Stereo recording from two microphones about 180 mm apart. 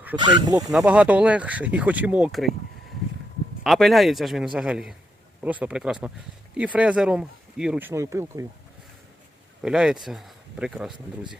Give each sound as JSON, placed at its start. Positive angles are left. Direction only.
{"t": 0.2, "sound": "speech", "side_deg": -25}
{"t": 0.7, "sound": "speech", "side_deg": -5}
{"t": 3.6, "sound": "a man's voice", "side_deg": 0}
{"t": 9.6, "sound": "a man's voice", "side_deg": -5}